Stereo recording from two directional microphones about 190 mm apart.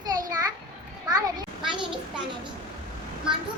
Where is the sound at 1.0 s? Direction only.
20° right (ahead or behind).